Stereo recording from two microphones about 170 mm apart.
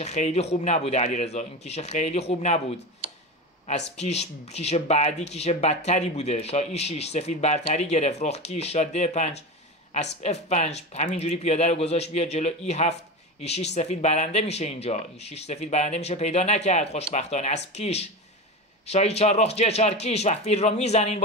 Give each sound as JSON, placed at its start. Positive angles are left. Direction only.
{"t": 0.0, "sound": "speech", "side_deg": 40}
{"t": 3.9, "sound": "speech", "side_deg": 40}